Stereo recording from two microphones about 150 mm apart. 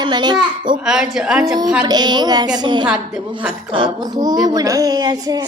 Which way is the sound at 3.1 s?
10° right (ahead or behind).